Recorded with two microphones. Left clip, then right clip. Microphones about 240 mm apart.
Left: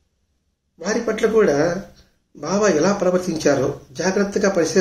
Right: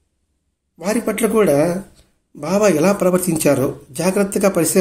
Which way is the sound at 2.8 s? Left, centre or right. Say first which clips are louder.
Right 2 dB; right.